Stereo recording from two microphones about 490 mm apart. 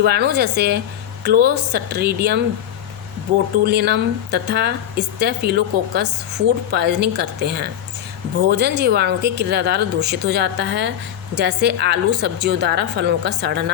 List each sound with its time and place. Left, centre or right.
0.0 s speech: centre
3.6 s speech: centre